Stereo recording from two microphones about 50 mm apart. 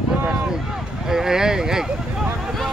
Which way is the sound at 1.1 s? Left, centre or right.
Centre.